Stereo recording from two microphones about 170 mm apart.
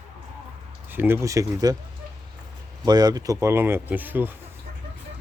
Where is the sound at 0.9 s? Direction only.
15° right (ahead or behind).